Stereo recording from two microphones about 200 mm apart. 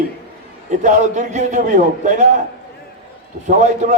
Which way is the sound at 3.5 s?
35° right (ahead or behind).